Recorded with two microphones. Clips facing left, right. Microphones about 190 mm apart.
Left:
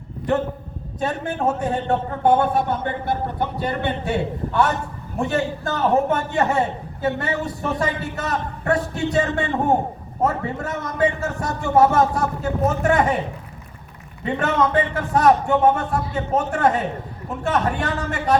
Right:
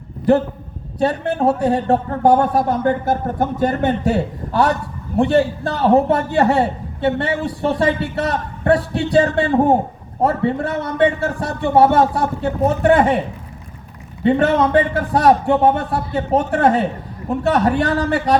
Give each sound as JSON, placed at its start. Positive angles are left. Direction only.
{"t": 0.9, "sound": "speech", "side_deg": -35}
{"t": 14.3, "sound": "speech", "side_deg": -30}